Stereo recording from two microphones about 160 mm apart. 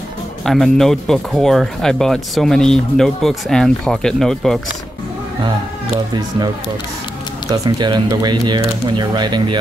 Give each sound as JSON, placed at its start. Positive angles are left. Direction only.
{"t": 0.5, "sound": "speech", "side_deg": 5}
{"t": 7.4, "sound": "speech", "side_deg": -20}